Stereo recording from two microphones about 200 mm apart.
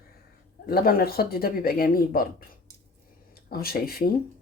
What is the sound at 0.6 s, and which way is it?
Speech, 50° left (ahead or behind).